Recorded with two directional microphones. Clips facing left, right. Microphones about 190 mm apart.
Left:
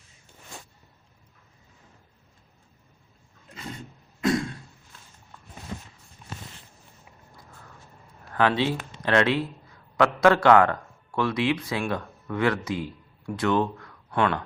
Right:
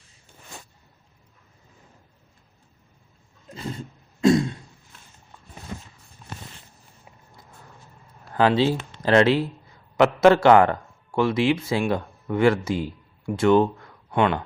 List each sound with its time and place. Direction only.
4.2 s beatboxing: 25° right (ahead or behind)
8.3 s a man's voice: 30° right (ahead or behind)